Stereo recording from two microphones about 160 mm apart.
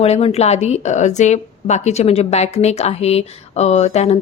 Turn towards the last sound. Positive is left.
turn(degrees=45)  # may be behind; listen again after turning